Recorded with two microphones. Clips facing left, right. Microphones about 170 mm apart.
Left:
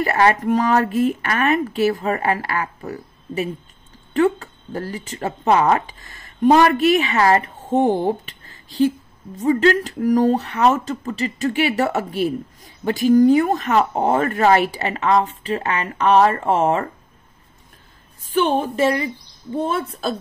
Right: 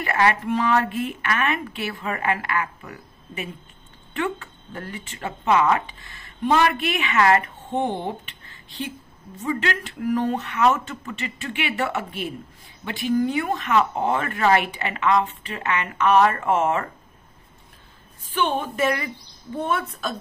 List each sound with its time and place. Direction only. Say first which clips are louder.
0.0 s speech: left 5 dB; 35° left (ahead or behind)
18.2 s speech: left 6 dB; 40° left (ahead or behind)